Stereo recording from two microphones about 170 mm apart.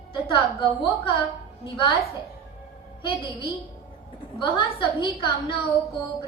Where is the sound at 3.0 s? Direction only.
30° left (ahead or behind).